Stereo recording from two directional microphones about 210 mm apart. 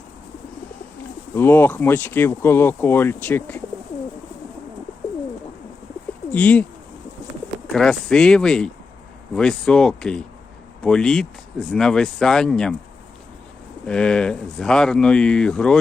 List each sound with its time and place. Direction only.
1.4 s speech: 10° left (ahead or behind)
6.3 s speech: 5° left (ahead or behind)
7.7 s speech: centre (ahead or behind)
13.8 s speech: 5° left (ahead or behind)